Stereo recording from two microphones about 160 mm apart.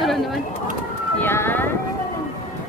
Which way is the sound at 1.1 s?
15° left (ahead or behind).